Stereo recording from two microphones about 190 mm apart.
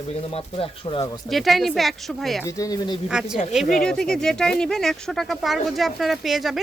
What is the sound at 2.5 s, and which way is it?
Speech, 20° left (ahead or behind).